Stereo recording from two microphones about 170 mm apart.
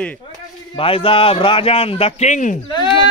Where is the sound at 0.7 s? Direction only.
30° left (ahead or behind).